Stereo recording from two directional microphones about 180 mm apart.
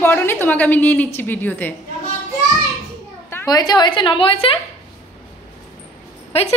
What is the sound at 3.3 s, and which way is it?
A woman's voice, 15° left (ahead or behind).